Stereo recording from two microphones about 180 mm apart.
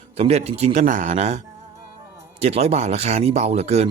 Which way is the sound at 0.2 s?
35° right (ahead or behind).